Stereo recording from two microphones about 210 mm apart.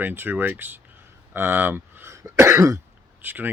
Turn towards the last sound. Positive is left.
turn(degrees=-10)  # may be behind; listen again after turning